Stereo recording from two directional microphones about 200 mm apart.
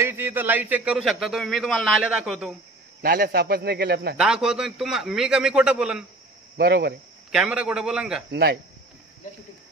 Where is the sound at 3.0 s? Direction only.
50° right (ahead or behind).